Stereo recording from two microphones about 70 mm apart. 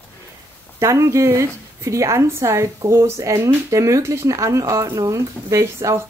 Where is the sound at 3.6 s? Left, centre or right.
Right.